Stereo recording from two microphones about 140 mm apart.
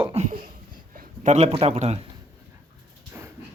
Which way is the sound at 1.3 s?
50° right (ahead or behind).